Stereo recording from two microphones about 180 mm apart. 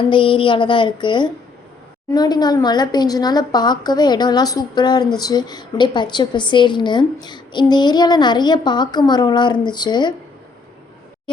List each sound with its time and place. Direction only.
0.1 s a woman's voice: 30° left (ahead or behind)